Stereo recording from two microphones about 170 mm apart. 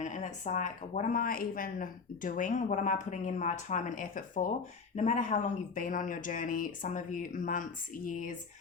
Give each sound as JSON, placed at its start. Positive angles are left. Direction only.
{"t": 0.0, "sound": "a woman's voice", "side_deg": 45}